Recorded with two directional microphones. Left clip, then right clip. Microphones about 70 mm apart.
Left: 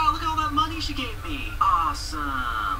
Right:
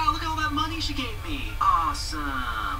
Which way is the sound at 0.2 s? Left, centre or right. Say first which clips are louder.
Left 3 dB; right.